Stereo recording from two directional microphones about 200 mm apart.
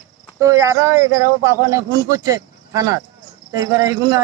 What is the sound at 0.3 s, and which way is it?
A man's voice, 15° right (ahead or behind).